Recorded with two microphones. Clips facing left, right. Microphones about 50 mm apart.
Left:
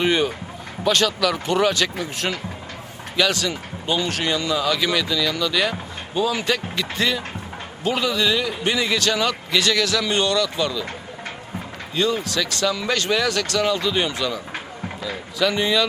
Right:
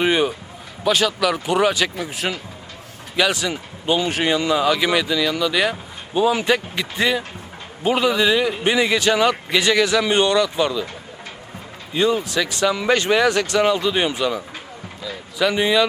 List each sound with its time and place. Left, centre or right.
0.0 s a man's voice: centre
11.9 s a man's voice: centre